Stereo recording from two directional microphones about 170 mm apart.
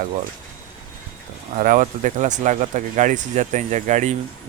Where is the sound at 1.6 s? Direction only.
50° right (ahead or behind).